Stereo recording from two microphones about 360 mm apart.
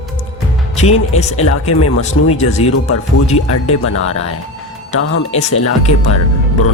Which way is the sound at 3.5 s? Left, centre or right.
Left.